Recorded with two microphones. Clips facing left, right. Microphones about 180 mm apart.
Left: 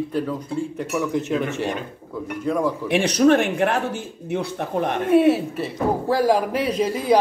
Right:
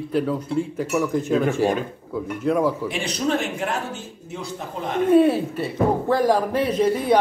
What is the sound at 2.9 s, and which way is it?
Speech, 65° left (ahead or behind).